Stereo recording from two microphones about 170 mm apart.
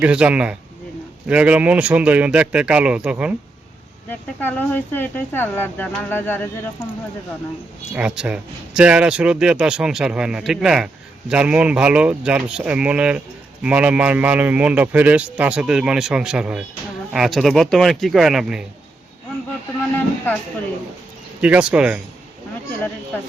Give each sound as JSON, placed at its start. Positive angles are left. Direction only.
{"t": 0.0, "sound": "speech", "side_deg": -5}
{"t": 4.1, "sound": "speech", "side_deg": 10}
{"t": 7.9, "sound": "a man's voice", "side_deg": -5}
{"t": 21.4, "sound": "speech", "side_deg": -5}